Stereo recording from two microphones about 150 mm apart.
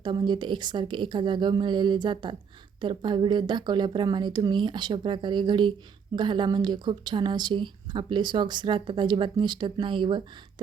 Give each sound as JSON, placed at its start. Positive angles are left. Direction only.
{"t": 0.0, "sound": "a woman's voice", "side_deg": -30}